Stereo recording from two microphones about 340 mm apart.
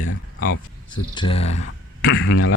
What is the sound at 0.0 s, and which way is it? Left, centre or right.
Speech, left.